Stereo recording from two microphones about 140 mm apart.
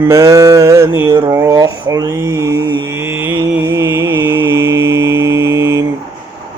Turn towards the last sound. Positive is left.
turn(degrees=-20)  # may be behind; listen again after turning